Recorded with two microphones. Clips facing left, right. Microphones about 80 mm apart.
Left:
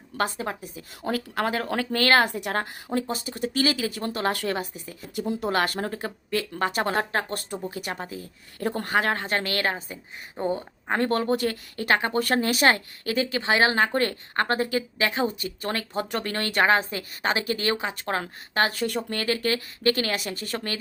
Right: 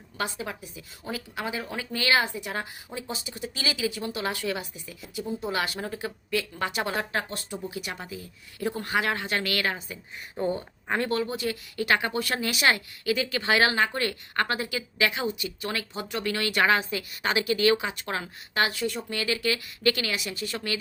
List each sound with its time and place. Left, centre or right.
0.2 s speech: left
1.0 s speech: left
5.2 s speech: left
5.5 s speech: left
10.3 s speech: left
10.9 s a woman's voice: left
11.2 s speech: left
11.8 s a woman's voice: left
13.3 s speech: left
13.7 s a woman's voice: left